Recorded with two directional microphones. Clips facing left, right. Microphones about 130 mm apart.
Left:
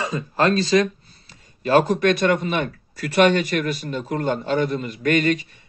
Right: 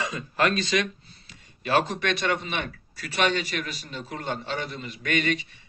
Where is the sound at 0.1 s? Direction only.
30° left (ahead or behind).